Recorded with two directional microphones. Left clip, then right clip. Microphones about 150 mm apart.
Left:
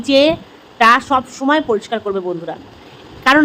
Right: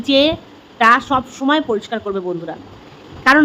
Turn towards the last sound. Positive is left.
turn(degrees=20)  # may be behind; listen again after turning